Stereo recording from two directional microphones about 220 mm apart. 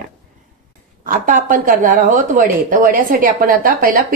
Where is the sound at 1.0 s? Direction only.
40° right (ahead or behind).